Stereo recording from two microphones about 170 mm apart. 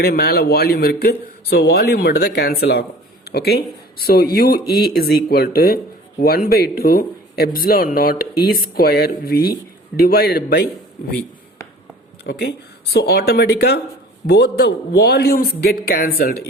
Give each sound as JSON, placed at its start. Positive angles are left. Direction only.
{"t": 0.0, "sound": "speech", "side_deg": 65}
{"t": 12.2, "sound": "speech", "side_deg": 75}